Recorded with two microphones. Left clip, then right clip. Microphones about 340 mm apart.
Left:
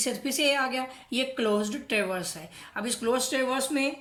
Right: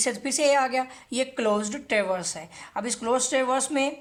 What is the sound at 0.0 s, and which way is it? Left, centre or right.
A woman's voice, right.